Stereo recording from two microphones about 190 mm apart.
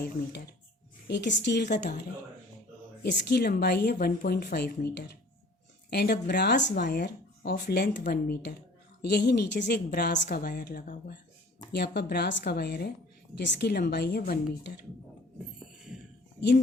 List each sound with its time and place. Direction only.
1.0 s speech: 65° left (ahead or behind)
3.0 s a woman's voice: 60° left (ahead or behind)
15.5 s music: 5° right (ahead or behind)